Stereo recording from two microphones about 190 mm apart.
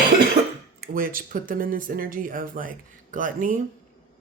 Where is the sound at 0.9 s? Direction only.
50° right (ahead or behind).